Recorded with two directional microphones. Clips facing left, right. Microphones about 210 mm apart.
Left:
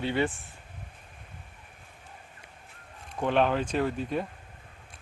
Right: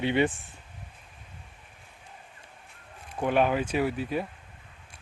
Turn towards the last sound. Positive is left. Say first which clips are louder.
# right 1 dB
turn(degrees=-5)  # may be behind; listen again after turning